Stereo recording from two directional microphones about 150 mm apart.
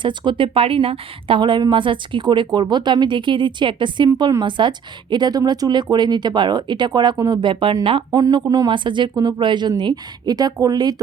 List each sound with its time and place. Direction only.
0.0 s a woman's voice: 30° right (ahead or behind)